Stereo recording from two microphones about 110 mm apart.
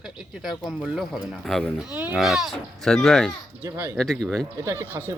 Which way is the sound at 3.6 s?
20° right (ahead or behind).